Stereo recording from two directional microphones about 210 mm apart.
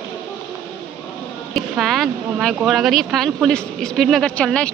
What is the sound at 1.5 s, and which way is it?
Speech, centre (ahead or behind).